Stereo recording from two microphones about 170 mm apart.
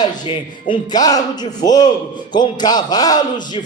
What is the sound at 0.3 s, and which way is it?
A man's voice, 25° left (ahead or behind).